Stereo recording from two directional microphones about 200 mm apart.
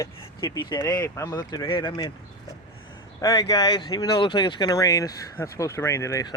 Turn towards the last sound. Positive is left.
turn(degrees=15)  # may be behind; listen again after turning